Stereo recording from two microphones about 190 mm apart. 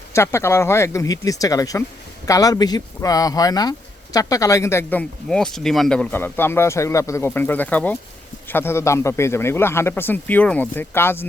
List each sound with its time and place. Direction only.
0.1 s speech: 15° left (ahead or behind)